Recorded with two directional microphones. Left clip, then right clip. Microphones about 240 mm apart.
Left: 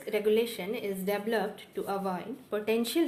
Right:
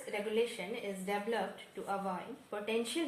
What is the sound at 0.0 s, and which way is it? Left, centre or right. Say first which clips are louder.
Speech: left 7 dB; left.